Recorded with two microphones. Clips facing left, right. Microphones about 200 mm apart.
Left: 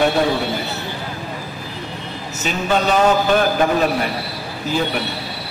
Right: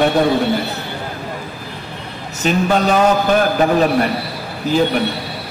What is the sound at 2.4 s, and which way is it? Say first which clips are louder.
Speech: right 4 dB; 40° right (ahead or behind).